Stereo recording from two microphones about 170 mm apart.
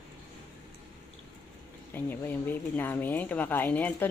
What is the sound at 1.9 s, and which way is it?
Speech, 10° left (ahead or behind).